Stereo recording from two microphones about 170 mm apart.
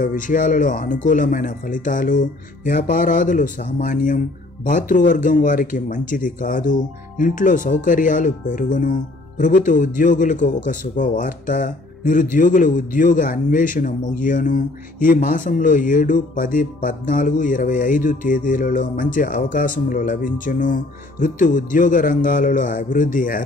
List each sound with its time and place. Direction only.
0.0 s speech: 50° left (ahead or behind)